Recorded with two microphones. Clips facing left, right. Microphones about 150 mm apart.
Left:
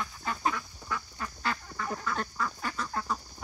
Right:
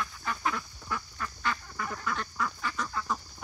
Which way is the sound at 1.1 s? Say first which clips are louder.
Even; 30° left (ahead or behind).